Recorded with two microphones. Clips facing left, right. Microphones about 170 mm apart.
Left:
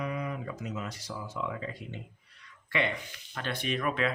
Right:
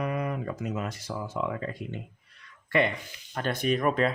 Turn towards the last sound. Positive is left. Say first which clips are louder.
# right 5 dB
turn(degrees=-40)  # may be behind; listen again after turning